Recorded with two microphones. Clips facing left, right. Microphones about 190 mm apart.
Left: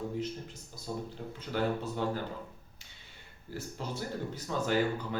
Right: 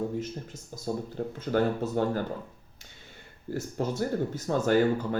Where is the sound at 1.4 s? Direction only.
45° right (ahead or behind).